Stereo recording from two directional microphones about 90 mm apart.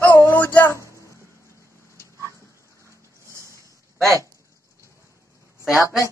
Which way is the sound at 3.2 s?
30° right (ahead or behind).